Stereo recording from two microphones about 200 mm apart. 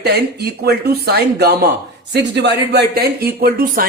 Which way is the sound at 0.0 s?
55° right (ahead or behind).